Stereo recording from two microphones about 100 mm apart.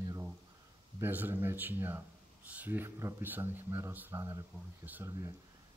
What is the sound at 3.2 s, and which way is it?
Speech, 20° right (ahead or behind).